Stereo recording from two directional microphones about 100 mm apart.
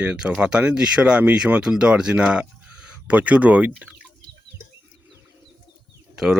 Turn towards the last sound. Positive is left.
turn(degrees=-5)  # may be behind; listen again after turning